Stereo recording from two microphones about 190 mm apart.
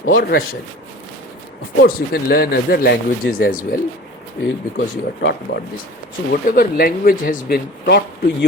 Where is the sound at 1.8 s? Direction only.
55° left (ahead or behind).